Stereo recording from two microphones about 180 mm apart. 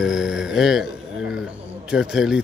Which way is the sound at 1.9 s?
5° right (ahead or behind).